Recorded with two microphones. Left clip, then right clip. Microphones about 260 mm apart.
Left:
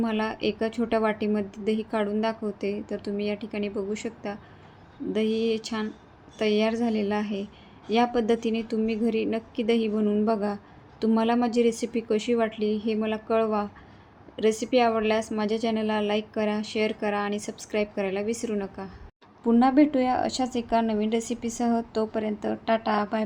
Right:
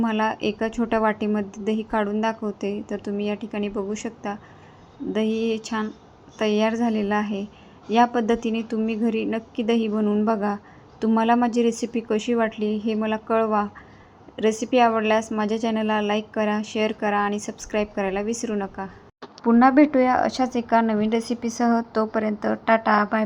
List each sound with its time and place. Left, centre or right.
0.0 s speech: centre